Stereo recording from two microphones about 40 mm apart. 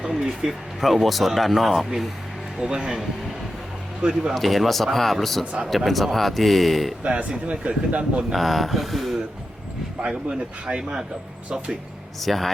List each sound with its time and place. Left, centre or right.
0.2 s speech: centre
2.6 s speech: centre
4.0 s speech: right
4.4 s speech: centre
7.0 s speech: right
8.3 s speech: centre
10.8 s speech: centre
12.2 s speech: centre